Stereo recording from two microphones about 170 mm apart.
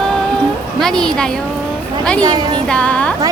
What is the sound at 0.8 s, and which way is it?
Speech, 5° left (ahead or behind).